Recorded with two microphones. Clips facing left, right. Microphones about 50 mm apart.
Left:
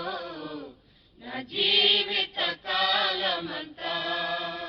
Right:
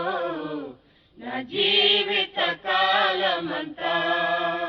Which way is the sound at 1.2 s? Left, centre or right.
Right.